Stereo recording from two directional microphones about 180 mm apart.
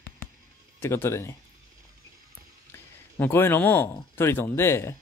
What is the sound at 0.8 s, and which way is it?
Speech, 15° left (ahead or behind).